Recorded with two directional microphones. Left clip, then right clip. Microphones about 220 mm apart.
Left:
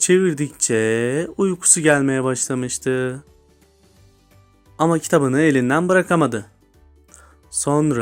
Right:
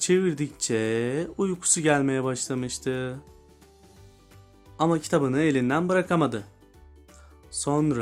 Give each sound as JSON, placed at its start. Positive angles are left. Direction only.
{"t": 0.0, "sound": "speech", "side_deg": 20}
{"t": 4.8, "sound": "speech", "side_deg": 25}
{"t": 7.5, "sound": "speech", "side_deg": 25}